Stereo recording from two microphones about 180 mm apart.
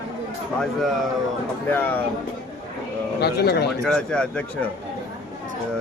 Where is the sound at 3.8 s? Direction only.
5° left (ahead or behind).